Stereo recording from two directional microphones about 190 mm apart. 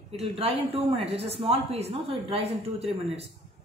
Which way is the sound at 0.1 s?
30° right (ahead or behind).